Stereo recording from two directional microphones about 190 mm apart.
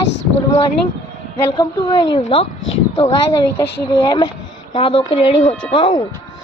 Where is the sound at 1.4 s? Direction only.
20° left (ahead or behind).